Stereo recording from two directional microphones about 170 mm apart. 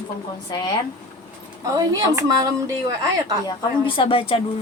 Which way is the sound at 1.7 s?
20° right (ahead or behind).